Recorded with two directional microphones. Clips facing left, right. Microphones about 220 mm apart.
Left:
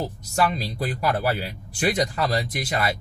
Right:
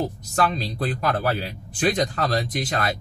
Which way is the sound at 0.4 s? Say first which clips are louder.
Even; 10° left (ahead or behind).